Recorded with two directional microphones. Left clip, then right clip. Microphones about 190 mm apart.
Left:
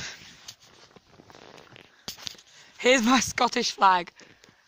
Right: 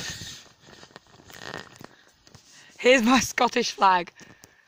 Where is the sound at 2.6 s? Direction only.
10° right (ahead or behind).